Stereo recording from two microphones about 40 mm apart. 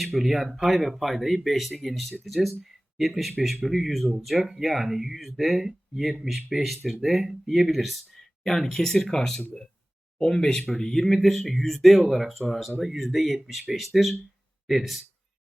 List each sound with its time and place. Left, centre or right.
0.0 s speech: centre
3.7 s speech: centre
8.4 s speech: centre